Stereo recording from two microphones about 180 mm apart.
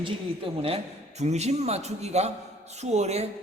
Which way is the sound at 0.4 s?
30° right (ahead or behind).